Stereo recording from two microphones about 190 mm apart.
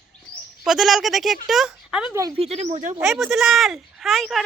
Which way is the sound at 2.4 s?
35° right (ahead or behind).